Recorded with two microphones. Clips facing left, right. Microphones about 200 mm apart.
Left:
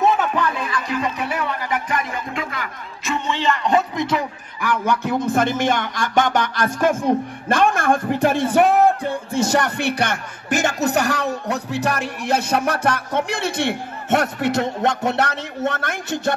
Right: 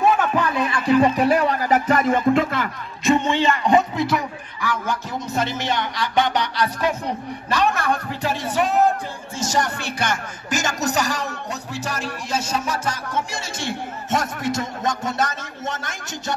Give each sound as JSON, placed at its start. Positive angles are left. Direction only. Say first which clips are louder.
{"t": 0.7, "sound": "speech", "louder": "right 7 dB", "side_deg": -30}
{"t": 3.3, "sound": "speech", "louder": "right 2 dB", "side_deg": -15}
{"t": 4.6, "sound": "a man's voice", "louder": "left 4 dB", "side_deg": 60}